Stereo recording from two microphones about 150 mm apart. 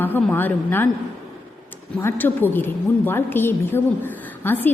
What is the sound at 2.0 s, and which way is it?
A woman's voice, 15° left (ahead or behind).